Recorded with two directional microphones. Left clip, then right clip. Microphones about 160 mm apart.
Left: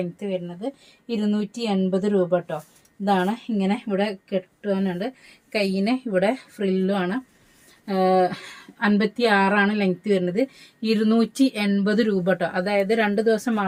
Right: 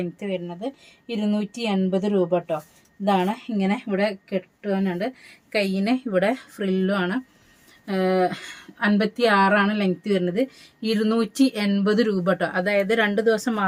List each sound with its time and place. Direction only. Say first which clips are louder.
0.0 s speech: left 1 dB; 20° right (ahead or behind)